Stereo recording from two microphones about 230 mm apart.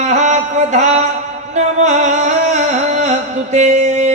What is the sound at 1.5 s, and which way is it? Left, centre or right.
Singing, right.